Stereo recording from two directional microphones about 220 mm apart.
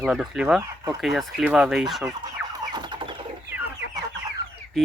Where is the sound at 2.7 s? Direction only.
20° right (ahead or behind).